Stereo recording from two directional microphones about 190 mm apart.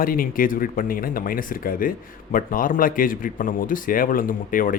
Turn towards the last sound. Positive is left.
turn(degrees=45)  # may be behind; listen again after turning